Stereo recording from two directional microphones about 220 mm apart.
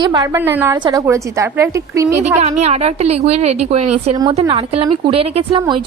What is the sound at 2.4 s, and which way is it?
Speech, 30° right (ahead or behind).